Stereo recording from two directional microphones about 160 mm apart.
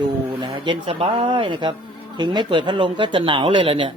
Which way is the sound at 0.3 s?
30° right (ahead or behind).